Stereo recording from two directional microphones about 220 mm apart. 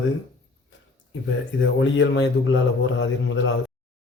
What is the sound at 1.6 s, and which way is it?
A man's voice, 55° left (ahead or behind).